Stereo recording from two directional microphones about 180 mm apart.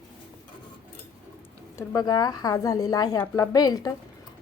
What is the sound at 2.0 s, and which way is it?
A woman's voice, 20° left (ahead or behind).